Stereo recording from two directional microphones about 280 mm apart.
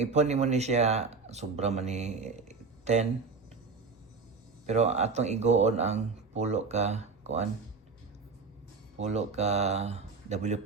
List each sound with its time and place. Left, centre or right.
0.0 s speech: right
4.6 s speech: right
9.0 s speech: right